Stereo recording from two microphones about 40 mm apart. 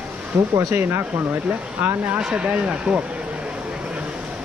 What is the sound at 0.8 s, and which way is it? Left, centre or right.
Speech, right.